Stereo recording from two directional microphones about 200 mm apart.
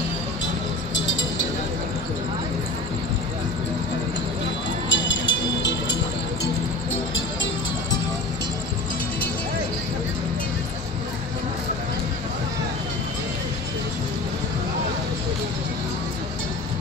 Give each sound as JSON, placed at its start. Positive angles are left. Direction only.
{"t": 0.9, "sound": "music", "side_deg": 70}
{"t": 4.8, "sound": "music", "side_deg": 65}